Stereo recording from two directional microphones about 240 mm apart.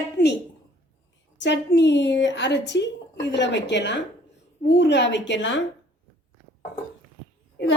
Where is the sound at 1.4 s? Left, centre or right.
Left.